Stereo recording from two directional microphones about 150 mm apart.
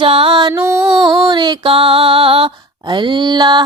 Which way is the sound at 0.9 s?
5° right (ahead or behind).